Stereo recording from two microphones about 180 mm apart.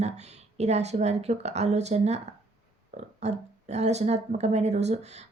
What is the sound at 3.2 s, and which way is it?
A woman's voice, 40° right (ahead or behind).